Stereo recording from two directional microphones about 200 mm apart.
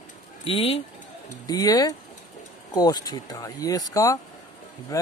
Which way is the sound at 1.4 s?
20° left (ahead or behind).